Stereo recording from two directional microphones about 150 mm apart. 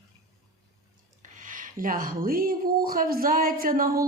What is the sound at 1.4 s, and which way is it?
Speech, 60° right (ahead or behind).